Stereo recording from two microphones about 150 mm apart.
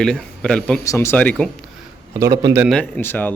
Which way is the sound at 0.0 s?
5° left (ahead or behind).